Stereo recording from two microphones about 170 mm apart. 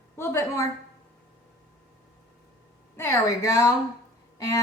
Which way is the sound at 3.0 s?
20° left (ahead or behind).